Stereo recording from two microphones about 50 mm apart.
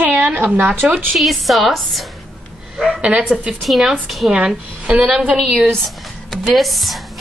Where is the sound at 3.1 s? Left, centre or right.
Right.